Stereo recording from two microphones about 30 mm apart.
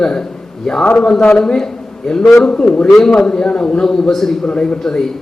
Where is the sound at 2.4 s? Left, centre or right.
Left.